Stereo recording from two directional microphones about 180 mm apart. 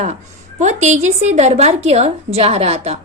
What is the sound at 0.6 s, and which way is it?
A woman's voice, 40° right (ahead or behind).